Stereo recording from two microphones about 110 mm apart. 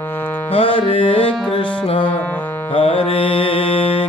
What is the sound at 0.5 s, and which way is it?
Music, 60° left (ahead or behind).